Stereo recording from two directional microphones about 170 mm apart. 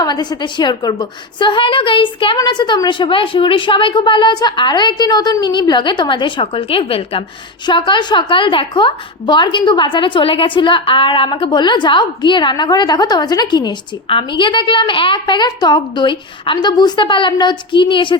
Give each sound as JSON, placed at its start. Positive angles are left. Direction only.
{"t": 0.0, "sound": "a woman's voice", "side_deg": 25}